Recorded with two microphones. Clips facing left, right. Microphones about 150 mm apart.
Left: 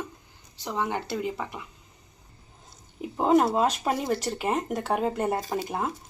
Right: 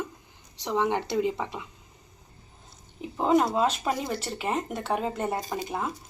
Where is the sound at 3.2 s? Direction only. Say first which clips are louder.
Left 1 dB; 5° left (ahead or behind).